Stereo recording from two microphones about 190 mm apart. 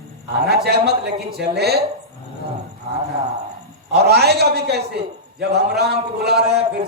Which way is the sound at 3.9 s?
60° right (ahead or behind).